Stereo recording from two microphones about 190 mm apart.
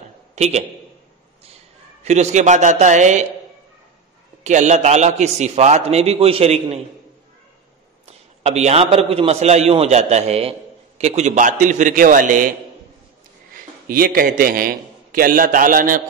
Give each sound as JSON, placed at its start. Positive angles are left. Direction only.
{"t": 0.4, "sound": "a man's voice", "side_deg": -35}
{"t": 2.0, "sound": "a man's voice", "side_deg": -35}
{"t": 4.4, "sound": "a man's voice", "side_deg": -40}
{"t": 8.4, "sound": "a man's voice", "side_deg": -35}
{"t": 13.8, "sound": "a man's voice", "side_deg": -50}